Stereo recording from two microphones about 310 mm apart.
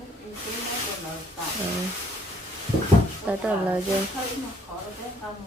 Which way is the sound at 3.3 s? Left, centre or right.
Centre.